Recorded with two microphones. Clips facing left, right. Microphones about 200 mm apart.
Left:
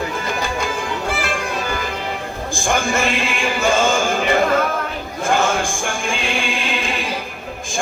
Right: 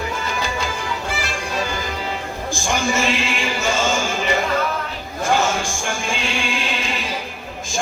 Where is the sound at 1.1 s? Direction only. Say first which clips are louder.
Left 4 dB; 55° left (ahead or behind).